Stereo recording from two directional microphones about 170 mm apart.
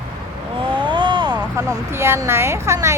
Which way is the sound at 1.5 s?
15° right (ahead or behind).